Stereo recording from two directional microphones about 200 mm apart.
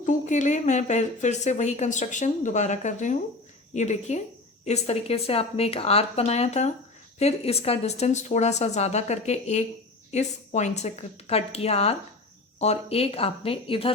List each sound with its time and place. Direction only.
0.0 s speech: 40° left (ahead or behind)